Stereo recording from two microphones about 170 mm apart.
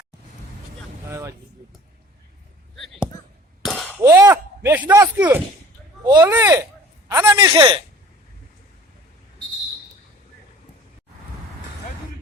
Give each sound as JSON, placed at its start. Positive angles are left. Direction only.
{"t": 2.7, "sound": "a sound", "side_deg": 0}
{"t": 3.6, "sound": "chink", "side_deg": 5}
{"t": 4.0, "sound": "speech", "side_deg": -15}
{"t": 6.1, "sound": "a man's voice", "side_deg": -20}